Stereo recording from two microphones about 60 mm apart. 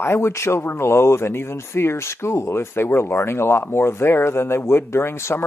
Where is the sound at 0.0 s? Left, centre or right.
Left.